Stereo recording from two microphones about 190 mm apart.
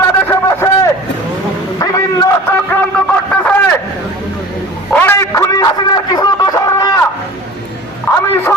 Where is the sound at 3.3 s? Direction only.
5° left (ahead or behind).